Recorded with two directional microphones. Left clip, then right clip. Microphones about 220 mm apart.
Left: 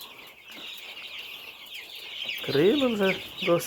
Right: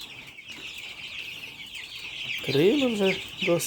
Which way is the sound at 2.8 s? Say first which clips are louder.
Even; 20° right (ahead or behind).